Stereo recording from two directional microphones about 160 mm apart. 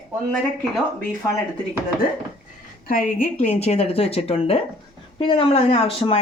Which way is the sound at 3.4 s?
40° left (ahead or behind).